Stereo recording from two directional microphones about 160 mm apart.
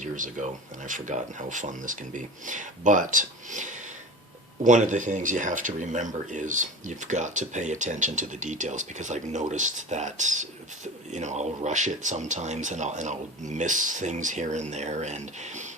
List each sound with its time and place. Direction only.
0.0 s speech: 50° right (ahead or behind)